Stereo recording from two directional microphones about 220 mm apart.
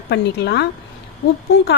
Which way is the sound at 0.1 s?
50° left (ahead or behind).